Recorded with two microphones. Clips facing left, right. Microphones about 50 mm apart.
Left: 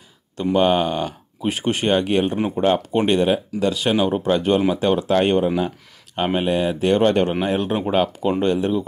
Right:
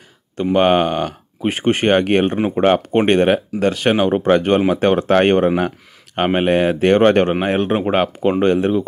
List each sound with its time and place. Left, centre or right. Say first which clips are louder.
0.4 s speech: right 3 dB; right